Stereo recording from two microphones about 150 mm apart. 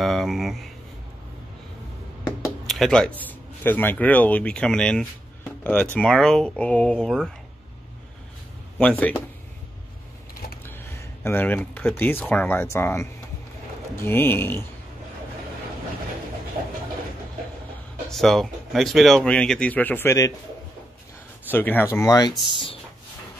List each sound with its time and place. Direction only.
0.0 s speech: centre (ahead or behind)
2.6 s a sound: centre (ahead or behind)
3.3 s speech: 10° left (ahead or behind)
8.7 s speech: 10° left (ahead or behind)
11.2 s speech: 10° left (ahead or behind)
18.1 s speech: centre (ahead or behind); by 20.3 s 20° left (ahead or behind)
21.5 s speech: 10° left (ahead or behind)